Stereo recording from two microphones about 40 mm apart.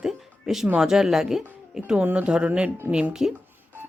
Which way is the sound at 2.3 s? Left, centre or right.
Right.